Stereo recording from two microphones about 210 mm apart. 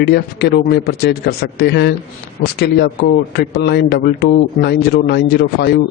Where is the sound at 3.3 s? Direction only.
50° left (ahead or behind).